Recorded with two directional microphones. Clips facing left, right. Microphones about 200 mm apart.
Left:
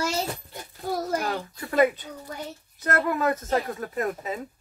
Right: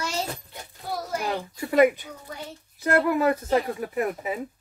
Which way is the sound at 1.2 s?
15° right (ahead or behind).